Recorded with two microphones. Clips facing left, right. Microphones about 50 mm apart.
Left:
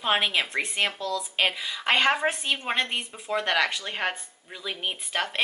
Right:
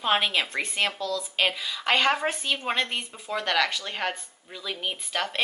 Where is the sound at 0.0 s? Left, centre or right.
Centre.